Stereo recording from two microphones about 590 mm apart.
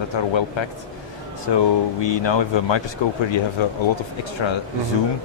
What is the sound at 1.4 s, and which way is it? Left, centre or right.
Speech, left.